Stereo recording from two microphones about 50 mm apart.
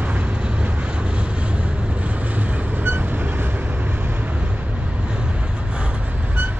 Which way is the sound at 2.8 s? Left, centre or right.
Right.